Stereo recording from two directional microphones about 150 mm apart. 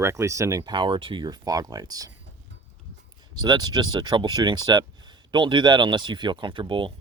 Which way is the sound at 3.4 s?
30° right (ahead or behind).